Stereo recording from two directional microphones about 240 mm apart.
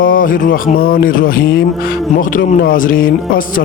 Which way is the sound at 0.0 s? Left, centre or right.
Left.